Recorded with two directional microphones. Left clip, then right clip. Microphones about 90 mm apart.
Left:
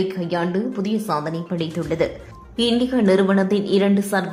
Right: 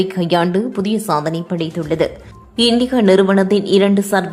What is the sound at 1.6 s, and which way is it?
A woman's voice, 30° right (ahead or behind).